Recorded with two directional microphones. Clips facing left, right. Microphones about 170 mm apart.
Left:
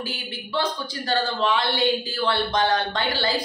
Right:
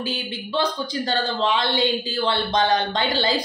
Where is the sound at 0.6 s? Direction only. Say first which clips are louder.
Right 3 dB; 20° right (ahead or behind).